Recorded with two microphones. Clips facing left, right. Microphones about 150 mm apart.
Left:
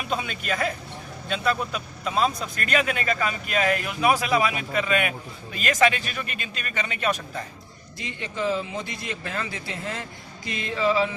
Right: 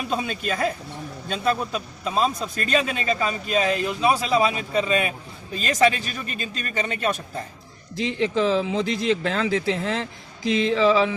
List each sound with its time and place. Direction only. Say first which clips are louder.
0.1 s a man's voice: even; 35° right (ahead or behind)
7.9 s speech: right 9 dB; 90° right